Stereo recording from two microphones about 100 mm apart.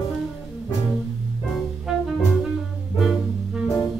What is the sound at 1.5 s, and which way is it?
Music, centre (ahead or behind).